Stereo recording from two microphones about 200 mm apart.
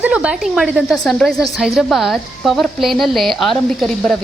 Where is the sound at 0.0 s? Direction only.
5° right (ahead or behind).